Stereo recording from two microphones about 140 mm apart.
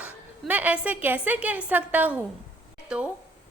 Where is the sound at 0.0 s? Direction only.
10° right (ahead or behind).